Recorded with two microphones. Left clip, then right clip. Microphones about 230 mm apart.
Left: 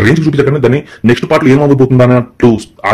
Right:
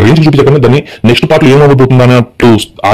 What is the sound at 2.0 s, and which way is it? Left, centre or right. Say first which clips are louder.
Speech: right 2 dB; right.